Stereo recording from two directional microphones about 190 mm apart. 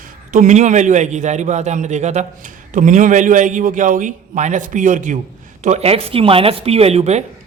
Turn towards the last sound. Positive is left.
turn(degrees=-35)  # may be behind; listen again after turning